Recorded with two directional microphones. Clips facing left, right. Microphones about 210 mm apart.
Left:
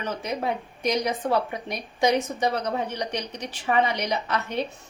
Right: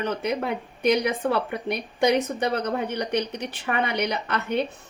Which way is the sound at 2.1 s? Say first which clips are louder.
Right 1 dB; 55° right (ahead or behind).